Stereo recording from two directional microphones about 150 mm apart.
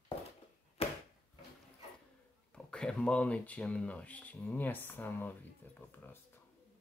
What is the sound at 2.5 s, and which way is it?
Speech, 5° left (ahead or behind).